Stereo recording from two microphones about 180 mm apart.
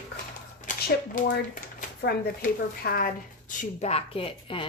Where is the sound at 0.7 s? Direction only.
45° left (ahead or behind).